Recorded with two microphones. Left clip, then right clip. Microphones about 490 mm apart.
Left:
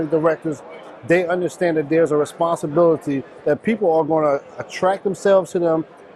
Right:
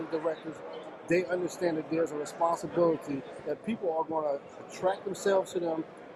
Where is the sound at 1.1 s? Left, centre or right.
Left.